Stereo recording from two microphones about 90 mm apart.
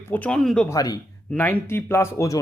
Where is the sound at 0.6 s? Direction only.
45° left (ahead or behind).